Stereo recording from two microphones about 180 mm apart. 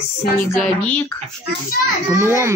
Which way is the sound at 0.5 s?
10° left (ahead or behind).